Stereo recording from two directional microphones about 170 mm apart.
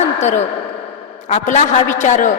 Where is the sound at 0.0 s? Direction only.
40° left (ahead or behind).